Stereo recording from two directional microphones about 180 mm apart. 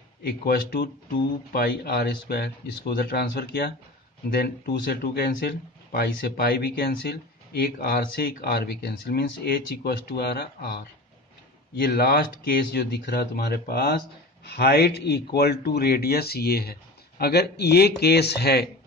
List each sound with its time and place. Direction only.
1.5 s speech: 55° left (ahead or behind)
11.8 s speech: 60° left (ahead or behind)